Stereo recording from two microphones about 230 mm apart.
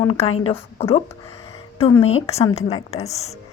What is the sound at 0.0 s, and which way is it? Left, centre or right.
A woman's voice, left.